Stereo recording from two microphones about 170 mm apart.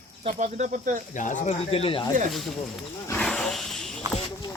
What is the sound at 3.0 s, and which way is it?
Wild animals, 5° left (ahead or behind).